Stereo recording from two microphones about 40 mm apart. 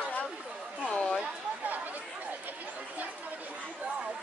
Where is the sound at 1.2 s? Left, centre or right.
Right.